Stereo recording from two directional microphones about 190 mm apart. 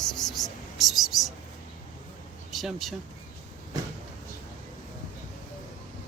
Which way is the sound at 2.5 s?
Centre (ahead or behind).